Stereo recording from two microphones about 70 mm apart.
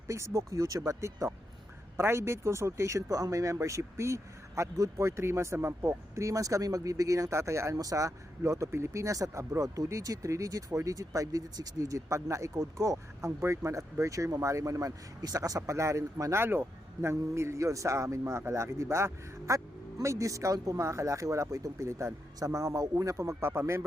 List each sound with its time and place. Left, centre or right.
0.1 s speech: right
16.4 s speech: right